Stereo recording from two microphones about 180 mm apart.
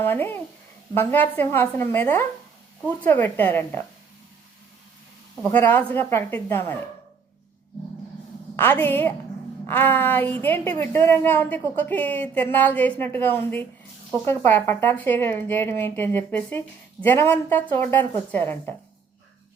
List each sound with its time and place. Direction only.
0.0 s speech: 10° left (ahead or behind)
5.4 s speech: 10° left (ahead or behind)
8.5 s speech: 10° left (ahead or behind)